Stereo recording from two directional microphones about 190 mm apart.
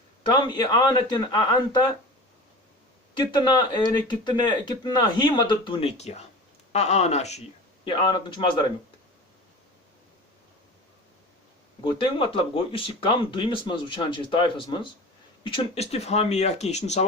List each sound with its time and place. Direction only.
0.2 s speech: 25° left (ahead or behind)
3.2 s speech: 25° left (ahead or behind)
7.9 s speech: 25° left (ahead or behind)
11.8 s speech: 25° left (ahead or behind)